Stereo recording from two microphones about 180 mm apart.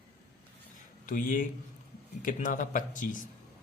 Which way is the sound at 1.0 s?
45° left (ahead or behind).